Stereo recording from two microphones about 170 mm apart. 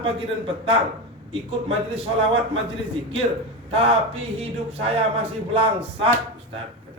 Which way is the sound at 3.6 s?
35° right (ahead or behind).